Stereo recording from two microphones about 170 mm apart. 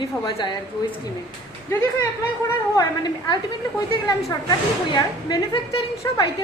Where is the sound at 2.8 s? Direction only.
25° left (ahead or behind).